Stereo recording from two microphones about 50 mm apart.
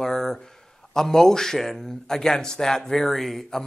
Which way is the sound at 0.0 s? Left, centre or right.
Centre.